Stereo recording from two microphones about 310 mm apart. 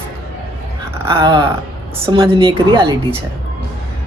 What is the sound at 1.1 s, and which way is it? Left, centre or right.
Speech, centre.